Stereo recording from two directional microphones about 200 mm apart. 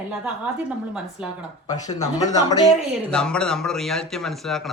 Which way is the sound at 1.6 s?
20° left (ahead or behind).